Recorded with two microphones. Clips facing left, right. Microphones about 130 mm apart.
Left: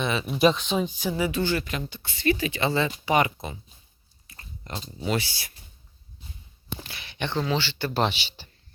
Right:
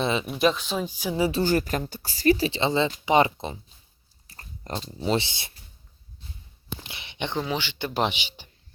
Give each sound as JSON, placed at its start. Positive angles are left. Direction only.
{"t": 0.0, "sound": "speech", "side_deg": -25}
{"t": 0.3, "sound": "speech", "side_deg": 0}
{"t": 1.1, "sound": "speech", "side_deg": -30}
{"t": 2.6, "sound": "speech", "side_deg": -20}
{"t": 4.3, "sound": "biting", "side_deg": -35}
{"t": 5.0, "sound": "speech", "side_deg": -25}
{"t": 6.8, "sound": "speech", "side_deg": -20}